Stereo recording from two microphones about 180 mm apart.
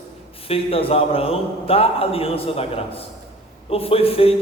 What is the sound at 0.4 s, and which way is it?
A man's voice, 30° left (ahead or behind).